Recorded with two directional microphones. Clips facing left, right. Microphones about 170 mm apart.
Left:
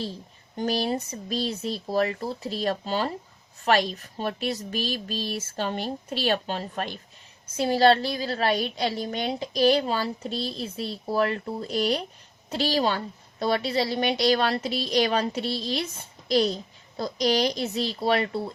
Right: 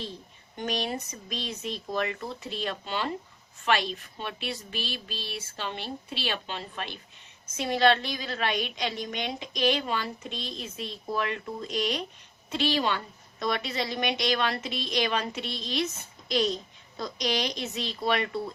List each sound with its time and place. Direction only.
0.5 s a woman's voice: 35° left (ahead or behind)